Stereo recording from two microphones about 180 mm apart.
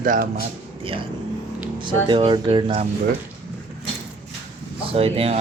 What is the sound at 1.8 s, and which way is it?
Speech, 25° right (ahead or behind).